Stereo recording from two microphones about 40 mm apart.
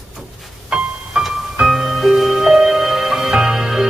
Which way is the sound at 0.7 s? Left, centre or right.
Centre.